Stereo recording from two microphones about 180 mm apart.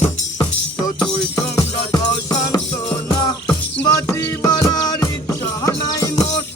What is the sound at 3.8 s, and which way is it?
Music, 20° left (ahead or behind).